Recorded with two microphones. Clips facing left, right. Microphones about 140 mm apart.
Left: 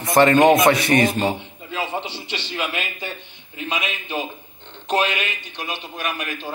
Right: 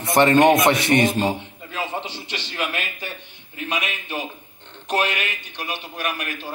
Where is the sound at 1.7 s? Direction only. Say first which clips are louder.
Left 2 dB; 15° left (ahead or behind).